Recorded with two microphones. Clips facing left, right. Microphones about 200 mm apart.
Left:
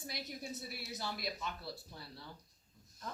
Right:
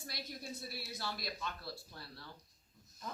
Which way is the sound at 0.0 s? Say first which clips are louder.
Left 2 dB; 15° left (ahead or behind).